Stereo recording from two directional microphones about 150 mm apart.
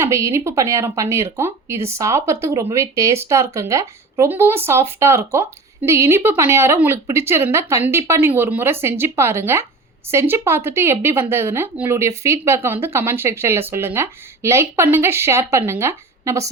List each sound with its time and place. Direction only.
0.0 s speech: 20° right (ahead or behind)